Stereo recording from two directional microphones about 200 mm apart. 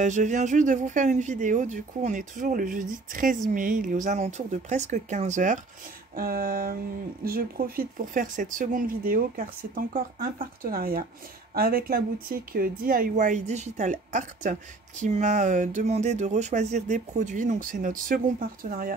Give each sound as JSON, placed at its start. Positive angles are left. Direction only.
{"t": 0.0, "sound": "speech", "side_deg": -35}